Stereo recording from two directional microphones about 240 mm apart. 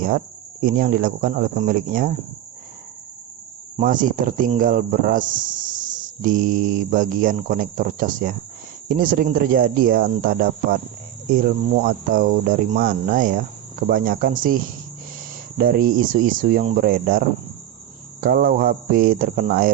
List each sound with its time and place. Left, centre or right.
0.6 s speech: right
3.8 s speech: right